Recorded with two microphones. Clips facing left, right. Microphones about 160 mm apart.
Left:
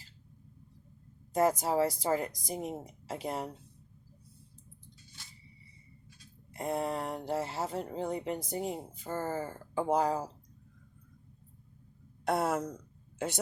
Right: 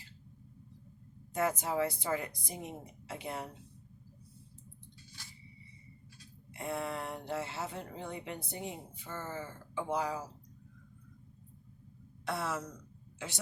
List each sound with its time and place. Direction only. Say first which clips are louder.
1.3 s speech: left 5 dB; 40° left (ahead or behind)
6.5 s speech: left 4 dB; 40° left (ahead or behind)
12.2 s speech: left 7 dB; 55° left (ahead or behind)